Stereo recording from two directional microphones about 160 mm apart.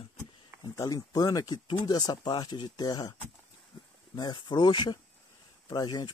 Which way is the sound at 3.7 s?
30° left (ahead or behind).